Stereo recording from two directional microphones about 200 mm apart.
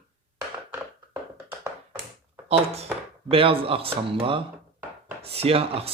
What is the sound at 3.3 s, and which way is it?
Speech, 25° right (ahead or behind).